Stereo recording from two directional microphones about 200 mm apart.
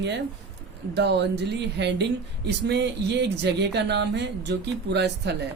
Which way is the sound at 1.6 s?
60° right (ahead or behind).